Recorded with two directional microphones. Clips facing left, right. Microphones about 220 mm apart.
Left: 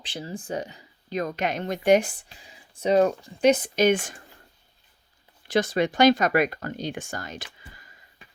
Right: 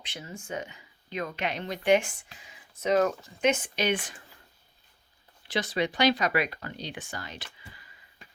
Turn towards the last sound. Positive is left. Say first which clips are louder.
# left 5 dB
turn(degrees=45)  # may be behind; listen again after turning